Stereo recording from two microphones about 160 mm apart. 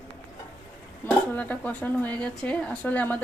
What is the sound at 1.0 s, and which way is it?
A woman's voice, 10° left (ahead or behind).